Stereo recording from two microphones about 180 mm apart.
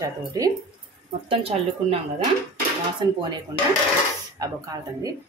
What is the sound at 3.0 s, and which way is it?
Speech, 25° right (ahead or behind).